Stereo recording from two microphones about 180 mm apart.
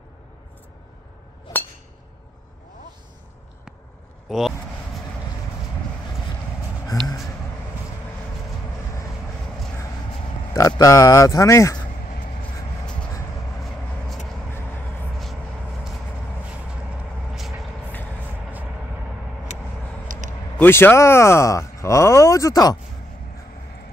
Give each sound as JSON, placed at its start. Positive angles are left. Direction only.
{"t": 1.5, "sound": "chink", "side_deg": 15}
{"t": 4.3, "sound": "speech", "side_deg": 0}
{"t": 7.0, "sound": "a sound", "side_deg": -25}
{"t": 10.8, "sound": "speech", "side_deg": 20}
{"t": 13.7, "sound": "vehicle", "side_deg": 0}
{"t": 16.9, "sound": "vehicle", "side_deg": 0}
{"t": 19.5, "sound": "vehicle", "side_deg": 40}
{"t": 20.5, "sound": "speech", "side_deg": 10}